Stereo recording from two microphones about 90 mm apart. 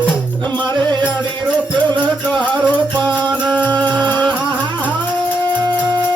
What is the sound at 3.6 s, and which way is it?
Music, 20° left (ahead or behind).